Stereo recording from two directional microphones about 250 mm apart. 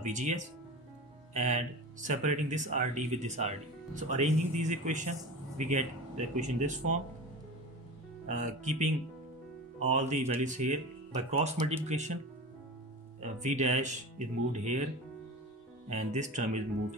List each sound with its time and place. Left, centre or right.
0.0 s speech: right
8.3 s speech: right
13.2 s speech: right
15.9 s speech: right